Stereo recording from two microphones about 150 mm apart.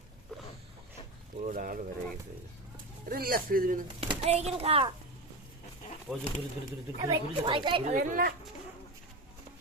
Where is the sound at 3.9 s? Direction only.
40° right (ahead or behind).